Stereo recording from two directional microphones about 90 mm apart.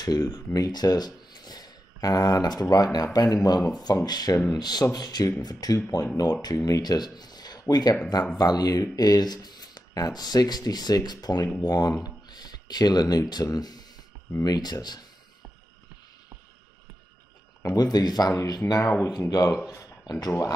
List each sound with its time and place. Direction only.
0.0 s speech: 45° left (ahead or behind)
17.7 s speech: 50° left (ahead or behind)